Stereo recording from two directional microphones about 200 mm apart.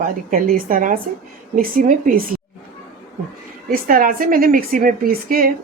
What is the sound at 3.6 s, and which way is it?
A woman's voice, 45° right (ahead or behind).